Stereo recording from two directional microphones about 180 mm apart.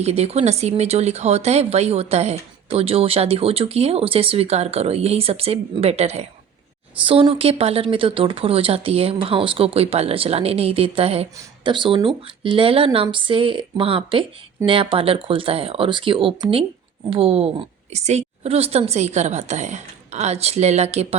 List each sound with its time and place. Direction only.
0.0 s speech: 35° right (ahead or behind)